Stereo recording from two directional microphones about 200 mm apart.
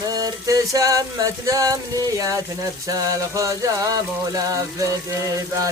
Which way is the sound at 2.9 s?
15° right (ahead or behind).